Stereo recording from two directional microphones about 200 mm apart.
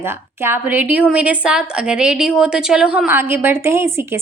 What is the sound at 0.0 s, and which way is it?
A woman's voice, 10° right (ahead or behind).